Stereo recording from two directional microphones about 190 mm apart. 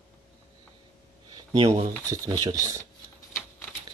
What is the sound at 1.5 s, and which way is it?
Speech, 20° right (ahead or behind).